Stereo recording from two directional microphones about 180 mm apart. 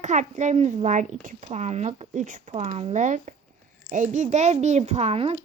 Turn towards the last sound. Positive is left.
turn(degrees=-35)  # may be behind; listen again after turning